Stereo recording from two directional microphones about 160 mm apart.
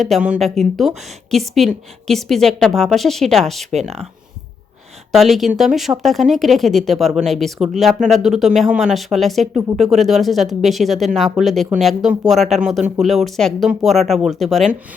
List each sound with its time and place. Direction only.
0.0 s speech: 5° right (ahead or behind)
3.7 s speech: 45° right (ahead or behind)
5.1 s speech: centre (ahead or behind)